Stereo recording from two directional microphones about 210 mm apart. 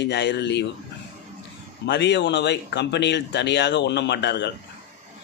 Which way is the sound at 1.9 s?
55° left (ahead or behind).